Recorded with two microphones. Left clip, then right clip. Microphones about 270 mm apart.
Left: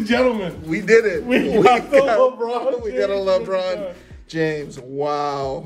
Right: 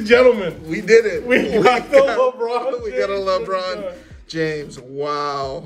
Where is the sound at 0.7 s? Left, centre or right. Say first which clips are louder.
Right 1 dB; centre.